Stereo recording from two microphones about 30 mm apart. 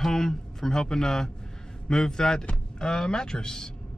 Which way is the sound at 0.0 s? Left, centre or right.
Centre.